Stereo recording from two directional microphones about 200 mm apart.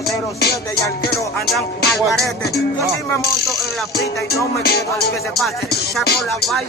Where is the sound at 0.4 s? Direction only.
55° left (ahead or behind).